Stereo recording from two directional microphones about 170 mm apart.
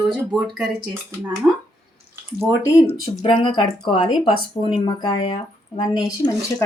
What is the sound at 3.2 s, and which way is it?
Speech, 30° left (ahead or behind).